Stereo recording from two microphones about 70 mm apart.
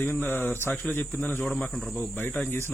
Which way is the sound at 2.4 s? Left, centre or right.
Left.